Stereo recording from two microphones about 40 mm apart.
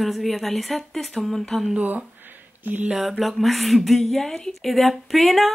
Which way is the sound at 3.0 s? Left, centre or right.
Centre.